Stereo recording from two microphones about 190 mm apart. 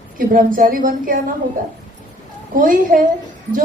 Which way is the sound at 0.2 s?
45° right (ahead or behind).